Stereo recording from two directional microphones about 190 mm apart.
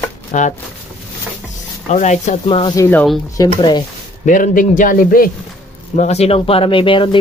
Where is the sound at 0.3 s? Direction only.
40° left (ahead or behind).